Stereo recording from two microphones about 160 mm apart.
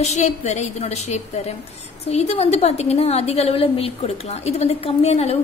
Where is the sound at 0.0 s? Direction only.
45° left (ahead or behind).